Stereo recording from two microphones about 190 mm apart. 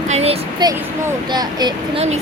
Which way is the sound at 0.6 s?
25° right (ahead or behind).